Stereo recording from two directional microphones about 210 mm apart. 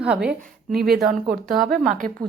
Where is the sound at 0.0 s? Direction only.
5° right (ahead or behind).